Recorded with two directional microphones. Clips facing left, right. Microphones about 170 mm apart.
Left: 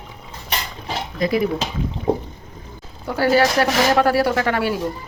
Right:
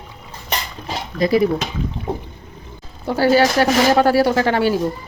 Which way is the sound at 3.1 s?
30° right (ahead or behind).